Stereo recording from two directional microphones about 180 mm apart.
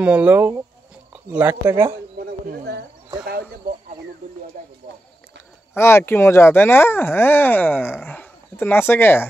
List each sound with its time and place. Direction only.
0.0 s speech: 5° right (ahead or behind)
2.1 s speech: 60° right (ahead or behind)
5.8 s speech: 15° left (ahead or behind)